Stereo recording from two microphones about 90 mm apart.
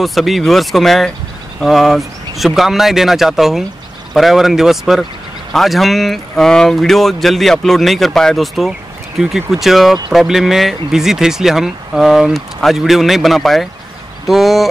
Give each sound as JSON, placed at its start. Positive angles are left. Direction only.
{"t": 0.0, "sound": "speech", "side_deg": 0}